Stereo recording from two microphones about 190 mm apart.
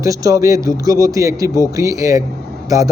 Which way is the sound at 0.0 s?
15° right (ahead or behind).